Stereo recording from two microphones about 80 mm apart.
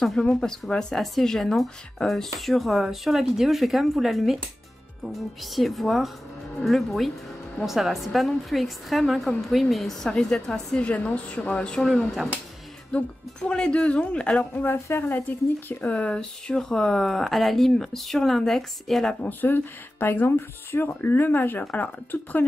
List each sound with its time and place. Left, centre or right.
0.0 s a woman's voice: centre
12.9 s a woman's voice: centre
14.5 s speech: left; by 19.1 s centre
19.2 s speech: left